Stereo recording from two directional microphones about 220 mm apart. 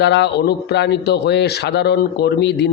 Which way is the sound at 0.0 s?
50° left (ahead or behind).